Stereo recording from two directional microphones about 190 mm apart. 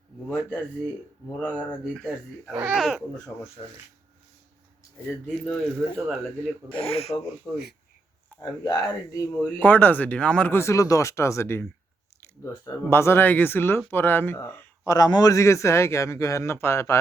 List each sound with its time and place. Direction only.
1.3 s speech: 5° left (ahead or behind)
5.5 s speech: centre (ahead or behind)
6.7 s speech: 30° left (ahead or behind)
7.5 s speech: centre (ahead or behind)
8.4 s speech: 20° left (ahead or behind)